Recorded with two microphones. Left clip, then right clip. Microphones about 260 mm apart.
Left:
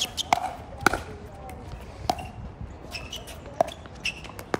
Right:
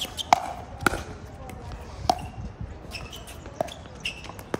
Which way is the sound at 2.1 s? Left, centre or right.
Centre.